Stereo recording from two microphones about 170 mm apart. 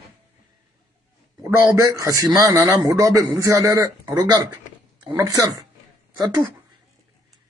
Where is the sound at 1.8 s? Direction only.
20° right (ahead or behind).